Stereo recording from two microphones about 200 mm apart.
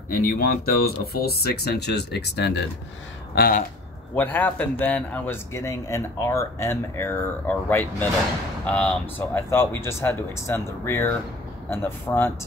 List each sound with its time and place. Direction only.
0.1 s speech: 45° left (ahead or behind)
4.1 s a man's voice: 10° left (ahead or behind)